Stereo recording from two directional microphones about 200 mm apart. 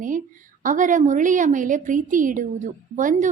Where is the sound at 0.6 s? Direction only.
40° right (ahead or behind).